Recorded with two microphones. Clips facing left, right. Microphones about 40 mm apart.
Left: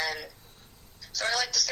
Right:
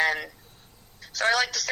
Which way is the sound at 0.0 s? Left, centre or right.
Right.